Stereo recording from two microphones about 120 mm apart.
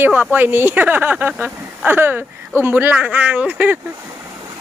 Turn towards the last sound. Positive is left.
turn(degrees=-10)  # may be behind; listen again after turning